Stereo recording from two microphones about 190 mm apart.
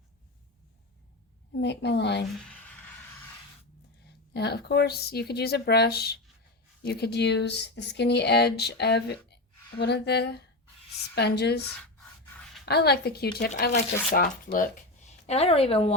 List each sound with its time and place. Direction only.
1.5 s speech: 65° left (ahead or behind)
2.4 s a sound: 5° left (ahead or behind)
4.4 s speech: 60° left (ahead or behind)
12.6 s speech: 60° left (ahead or behind)
14.1 s speech: 45° left (ahead or behind)